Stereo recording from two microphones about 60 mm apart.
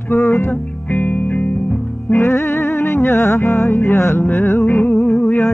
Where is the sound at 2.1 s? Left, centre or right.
Left.